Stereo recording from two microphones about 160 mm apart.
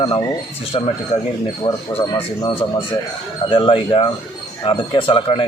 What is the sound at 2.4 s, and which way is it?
Speech, 35° left (ahead or behind).